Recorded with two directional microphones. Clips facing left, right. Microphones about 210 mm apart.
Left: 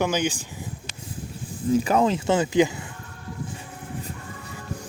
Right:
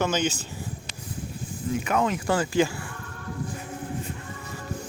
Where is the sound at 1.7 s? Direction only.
30° left (ahead or behind).